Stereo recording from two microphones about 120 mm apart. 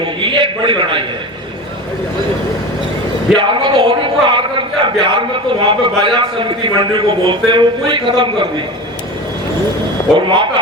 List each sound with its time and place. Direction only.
0.0 s a man's voice: 45° right (ahead or behind)
3.3 s a man's voice: 40° right (ahead or behind)
10.2 s a man's voice: 40° right (ahead or behind)